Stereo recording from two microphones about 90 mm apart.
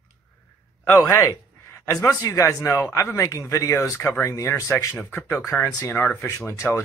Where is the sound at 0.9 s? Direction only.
35° left (ahead or behind).